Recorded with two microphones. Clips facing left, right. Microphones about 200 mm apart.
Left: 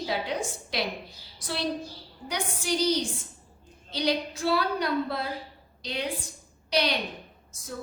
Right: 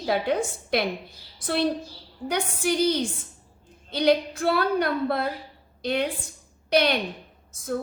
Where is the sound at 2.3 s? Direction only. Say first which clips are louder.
Right 5 dB; 55° right (ahead or behind).